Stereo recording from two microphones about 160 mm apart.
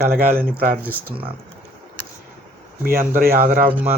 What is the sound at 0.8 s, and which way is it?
Speech, 10° right (ahead or behind).